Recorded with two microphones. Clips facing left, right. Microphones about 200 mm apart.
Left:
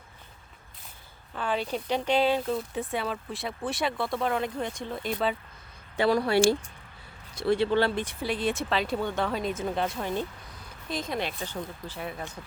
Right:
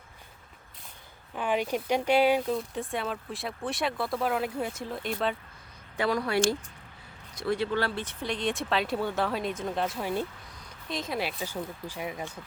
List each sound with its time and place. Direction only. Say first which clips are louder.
1.4 s speech: right 1 dB; 15° right (ahead or behind)
2.5 s speech: left 1 dB; centre (ahead or behind)
6.0 s speech: left 4 dB; 30° left (ahead or behind)
8.0 s speech: left 2 dB; 5° left (ahead or behind); by 12.4 s 15° right (ahead or behind)